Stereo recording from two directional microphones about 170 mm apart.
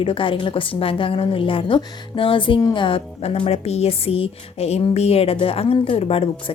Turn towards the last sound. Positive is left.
turn(degrees=35)  # may be behind; listen again after turning